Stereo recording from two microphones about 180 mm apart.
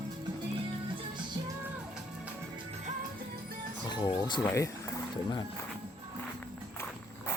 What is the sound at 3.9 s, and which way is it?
Speech, 25° left (ahead or behind).